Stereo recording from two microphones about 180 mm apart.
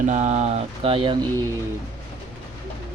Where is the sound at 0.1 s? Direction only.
40° right (ahead or behind).